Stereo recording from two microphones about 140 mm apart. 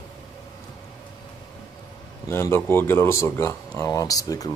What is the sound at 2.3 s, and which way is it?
Speech, 15° left (ahead or behind).